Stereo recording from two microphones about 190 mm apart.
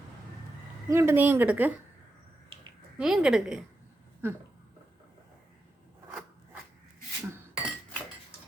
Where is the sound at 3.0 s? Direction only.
5° right (ahead or behind).